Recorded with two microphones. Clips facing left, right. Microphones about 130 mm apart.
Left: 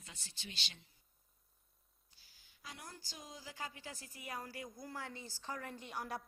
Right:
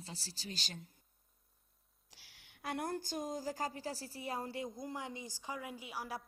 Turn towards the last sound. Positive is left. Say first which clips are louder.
# even
turn(degrees=-5)  # may be behind; listen again after turning